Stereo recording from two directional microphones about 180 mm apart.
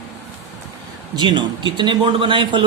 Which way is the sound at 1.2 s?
25° right (ahead or behind).